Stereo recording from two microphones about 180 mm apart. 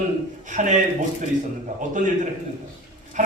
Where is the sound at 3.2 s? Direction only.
40° right (ahead or behind).